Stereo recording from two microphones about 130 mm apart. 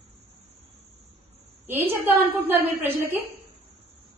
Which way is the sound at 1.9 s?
15° right (ahead or behind).